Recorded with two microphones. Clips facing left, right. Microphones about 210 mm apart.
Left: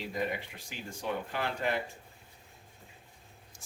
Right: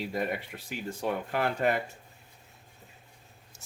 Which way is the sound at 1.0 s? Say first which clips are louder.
Right 4 dB; 55° right (ahead or behind).